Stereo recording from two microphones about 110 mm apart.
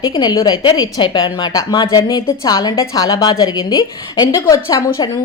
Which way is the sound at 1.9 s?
35° left (ahead or behind).